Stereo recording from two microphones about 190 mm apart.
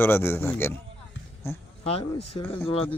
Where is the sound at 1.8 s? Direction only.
30° left (ahead or behind).